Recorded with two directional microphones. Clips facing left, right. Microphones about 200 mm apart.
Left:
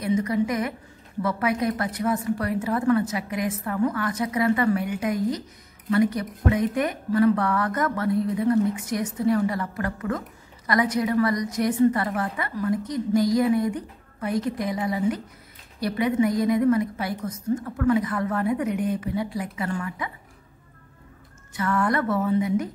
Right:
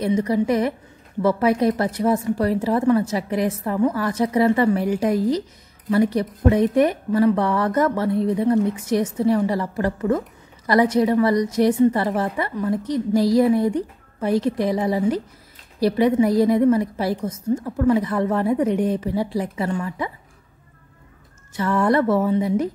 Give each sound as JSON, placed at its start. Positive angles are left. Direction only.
{"t": 0.0, "sound": "a woman's voice", "side_deg": -30}
{"t": 21.5, "sound": "a woman's voice", "side_deg": -25}